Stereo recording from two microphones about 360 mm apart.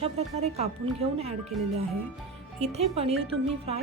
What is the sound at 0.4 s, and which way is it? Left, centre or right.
Speech, centre.